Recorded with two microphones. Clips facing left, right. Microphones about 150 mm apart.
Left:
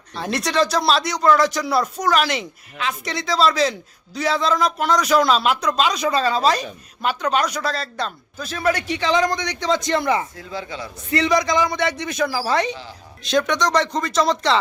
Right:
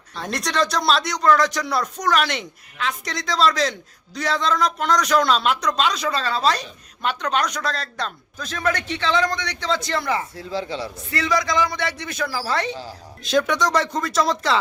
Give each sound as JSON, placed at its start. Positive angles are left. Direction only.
{"t": 0.1, "sound": "speech", "side_deg": 5}
{"t": 10.3, "sound": "speech", "side_deg": -30}
{"t": 10.9, "sound": "speech", "side_deg": 20}
{"t": 13.2, "sound": "speech", "side_deg": -5}